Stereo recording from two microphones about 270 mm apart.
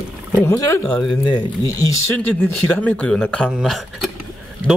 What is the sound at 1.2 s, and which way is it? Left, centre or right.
Speech, centre.